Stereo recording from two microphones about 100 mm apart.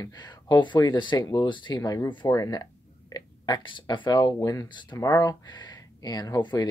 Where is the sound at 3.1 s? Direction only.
45° left (ahead or behind).